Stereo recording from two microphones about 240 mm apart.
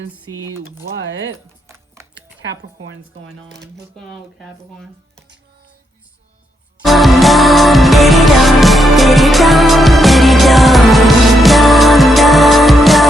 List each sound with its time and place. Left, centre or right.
0.1 s speech: centre
0.9 s speech: right
2.4 s speech: right
3.9 s speech: centre
6.8 s music: centre